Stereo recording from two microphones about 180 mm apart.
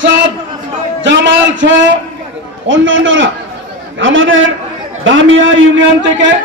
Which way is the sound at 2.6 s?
90° right.